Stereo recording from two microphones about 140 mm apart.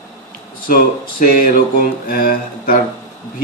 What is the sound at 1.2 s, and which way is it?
Speech, 90° left.